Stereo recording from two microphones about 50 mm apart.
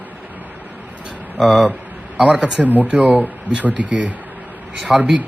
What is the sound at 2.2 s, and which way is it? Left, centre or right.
Speech, centre.